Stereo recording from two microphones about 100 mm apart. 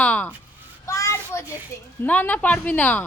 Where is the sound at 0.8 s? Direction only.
30° left (ahead or behind).